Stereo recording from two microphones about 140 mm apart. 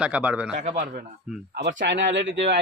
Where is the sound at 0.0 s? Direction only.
10° right (ahead or behind).